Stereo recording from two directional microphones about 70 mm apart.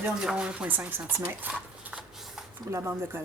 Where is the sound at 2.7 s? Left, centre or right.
Right.